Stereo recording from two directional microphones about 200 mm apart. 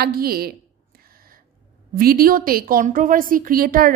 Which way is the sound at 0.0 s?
50° right (ahead or behind).